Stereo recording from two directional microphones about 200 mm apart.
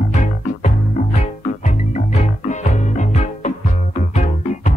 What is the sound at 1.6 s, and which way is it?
Music, 35° left (ahead or behind).